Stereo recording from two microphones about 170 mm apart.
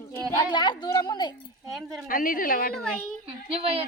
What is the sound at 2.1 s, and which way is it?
Speech, 55° left (ahead or behind).